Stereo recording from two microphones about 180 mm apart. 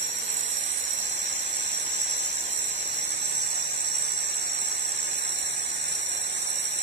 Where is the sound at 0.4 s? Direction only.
85° right.